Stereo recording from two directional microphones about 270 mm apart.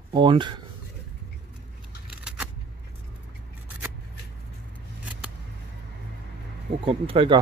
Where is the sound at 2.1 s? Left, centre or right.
Centre.